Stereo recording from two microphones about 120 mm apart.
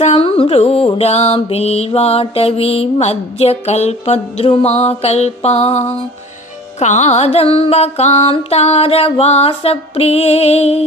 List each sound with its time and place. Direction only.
0.0 s music: 55° left (ahead or behind)
6.7 s music: 75° left (ahead or behind)
7.3 s music: 55° left (ahead or behind)